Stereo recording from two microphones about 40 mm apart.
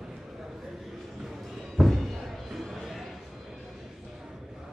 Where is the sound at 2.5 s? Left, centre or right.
Centre.